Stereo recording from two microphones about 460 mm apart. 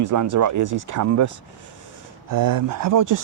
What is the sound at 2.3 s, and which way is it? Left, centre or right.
Speech, right.